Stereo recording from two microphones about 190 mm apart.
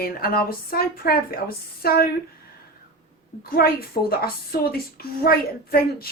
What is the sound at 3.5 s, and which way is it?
A woman's voice, 55° left (ahead or behind).